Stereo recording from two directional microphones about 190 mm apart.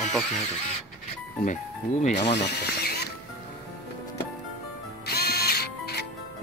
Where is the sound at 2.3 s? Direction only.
60° left (ahead or behind).